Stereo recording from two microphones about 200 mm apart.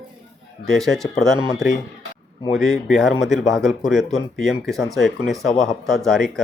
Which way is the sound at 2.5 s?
Centre (ahead or behind).